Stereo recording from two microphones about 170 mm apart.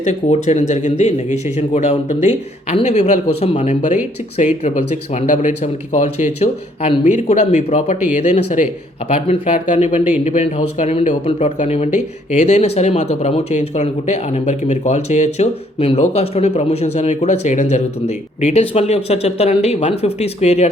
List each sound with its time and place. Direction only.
0.0 s speech: 40° left (ahead or behind)
3.8 s speech: 45° left (ahead or behind)